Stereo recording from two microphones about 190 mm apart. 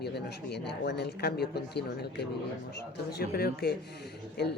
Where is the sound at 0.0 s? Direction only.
60° left (ahead or behind).